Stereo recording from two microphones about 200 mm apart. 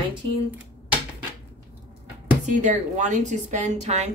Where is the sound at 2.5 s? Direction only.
35° right (ahead or behind).